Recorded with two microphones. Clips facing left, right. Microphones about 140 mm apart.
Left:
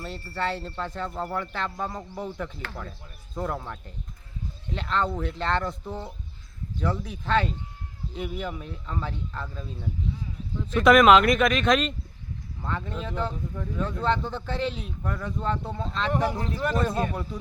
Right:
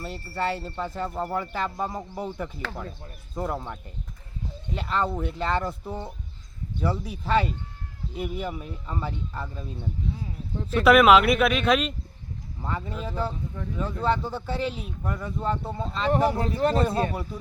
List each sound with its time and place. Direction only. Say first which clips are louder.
0.0 s speech: right 1 dB; 5° right (ahead or behind)
10.8 s speech: even; 5° right (ahead or behind)
16.1 s speech: right 5 dB; 30° right (ahead or behind)